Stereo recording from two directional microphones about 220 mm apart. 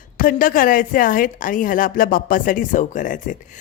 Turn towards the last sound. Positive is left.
turn(degrees=35)  # may be behind; listen again after turning